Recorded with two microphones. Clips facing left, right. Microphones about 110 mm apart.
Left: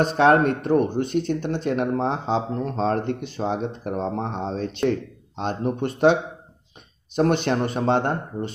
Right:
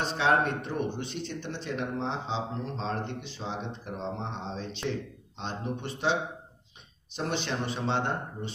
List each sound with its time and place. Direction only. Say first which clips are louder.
0.0 s speech: left 9 dB; 50° left (ahead or behind)
7.2 s speech: left 11 dB; 55° left (ahead or behind)